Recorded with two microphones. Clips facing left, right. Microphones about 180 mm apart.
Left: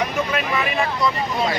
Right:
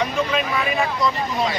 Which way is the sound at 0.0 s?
5° left (ahead or behind).